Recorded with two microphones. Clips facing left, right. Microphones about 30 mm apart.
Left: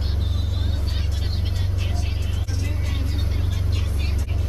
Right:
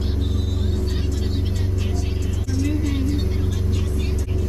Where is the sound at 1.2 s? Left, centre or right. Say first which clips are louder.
Right 4 dB; centre.